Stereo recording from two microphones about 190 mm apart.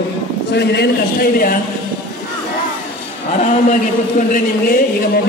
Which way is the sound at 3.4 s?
40° left (ahead or behind).